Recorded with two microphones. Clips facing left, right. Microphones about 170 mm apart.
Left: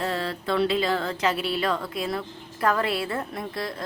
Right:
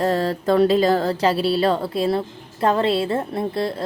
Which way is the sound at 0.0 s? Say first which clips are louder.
Right 8 dB; 40° right (ahead or behind).